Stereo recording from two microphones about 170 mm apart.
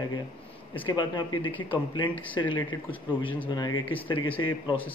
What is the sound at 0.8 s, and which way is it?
Speech, 30° left (ahead or behind).